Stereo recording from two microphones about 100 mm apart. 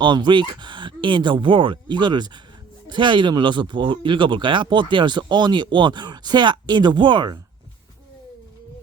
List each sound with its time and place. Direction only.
0.0 s speech: 50° right (ahead or behind)